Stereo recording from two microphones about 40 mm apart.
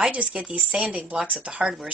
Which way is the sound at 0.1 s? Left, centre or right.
Right.